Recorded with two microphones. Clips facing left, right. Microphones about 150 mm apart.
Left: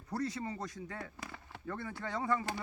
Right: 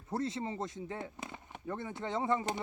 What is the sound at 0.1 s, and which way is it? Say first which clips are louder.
Speech: right 2 dB; 25° right (ahead or behind).